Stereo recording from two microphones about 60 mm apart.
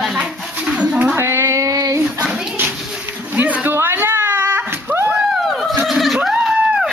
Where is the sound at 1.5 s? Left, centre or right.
Right.